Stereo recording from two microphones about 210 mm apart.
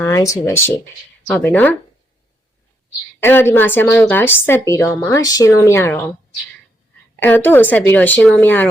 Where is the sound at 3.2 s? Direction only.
10° left (ahead or behind).